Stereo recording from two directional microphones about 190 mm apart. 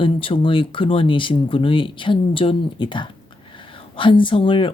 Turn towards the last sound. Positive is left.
turn(degrees=30)  # may be behind; listen again after turning